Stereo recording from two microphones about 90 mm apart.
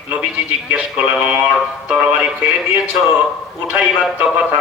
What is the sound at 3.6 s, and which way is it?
Speech, 15° right (ahead or behind).